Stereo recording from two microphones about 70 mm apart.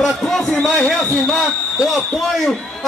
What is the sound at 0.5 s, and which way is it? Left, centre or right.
Speech, centre.